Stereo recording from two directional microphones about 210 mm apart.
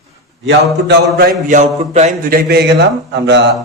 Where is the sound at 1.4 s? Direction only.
35° right (ahead or behind).